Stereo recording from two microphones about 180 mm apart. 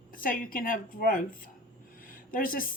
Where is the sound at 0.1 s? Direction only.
50° left (ahead or behind).